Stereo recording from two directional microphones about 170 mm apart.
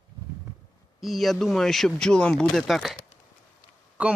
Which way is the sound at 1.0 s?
Centre (ahead or behind).